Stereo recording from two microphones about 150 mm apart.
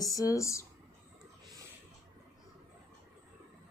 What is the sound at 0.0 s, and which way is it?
Speech, 20° left (ahead or behind).